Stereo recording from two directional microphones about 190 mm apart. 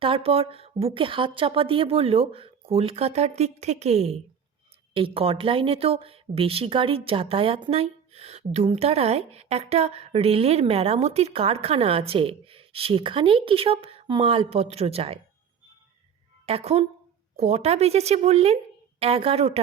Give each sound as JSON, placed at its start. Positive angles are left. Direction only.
{"t": 0.0, "sound": "a woman's voice", "side_deg": -30}
{"t": 16.5, "sound": "a woman's voice", "side_deg": -30}